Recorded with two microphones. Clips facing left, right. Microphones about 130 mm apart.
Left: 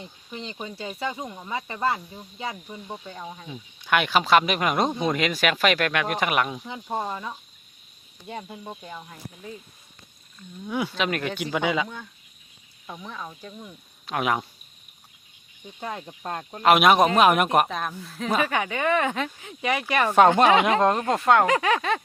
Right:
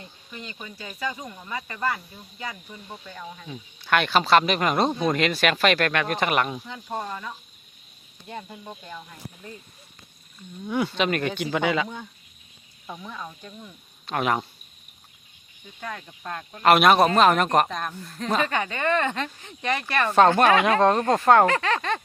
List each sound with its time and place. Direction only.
0.0 s speech: 20° left (ahead or behind); by 6.6 s 5° left (ahead or behind)
6.7 s speech: 20° left (ahead or behind)
10.7 s speech: 5° left (ahead or behind)
12.9 s speech: 5° right (ahead or behind)
15.8 s speech: 25° left (ahead or behind)
16.6 s speech: 5° left (ahead or behind)
21.4 s speech: 10° left (ahead or behind)